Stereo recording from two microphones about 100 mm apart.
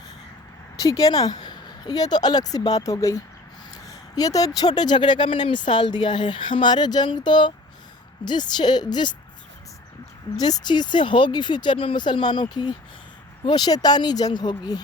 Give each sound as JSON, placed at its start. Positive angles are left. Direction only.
{"t": 0.8, "sound": "speech", "side_deg": 35}
{"t": 10.3, "sound": "speech", "side_deg": 40}